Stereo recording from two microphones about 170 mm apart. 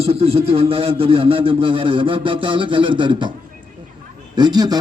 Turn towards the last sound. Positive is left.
turn(degrees=-25)  # may be behind; listen again after turning